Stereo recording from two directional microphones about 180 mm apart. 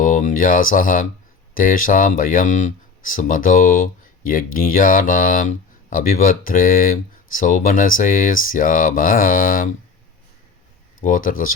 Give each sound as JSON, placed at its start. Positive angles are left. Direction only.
{"t": 0.0, "sound": "speech", "side_deg": 45}
{"t": 11.0, "sound": "speech", "side_deg": 50}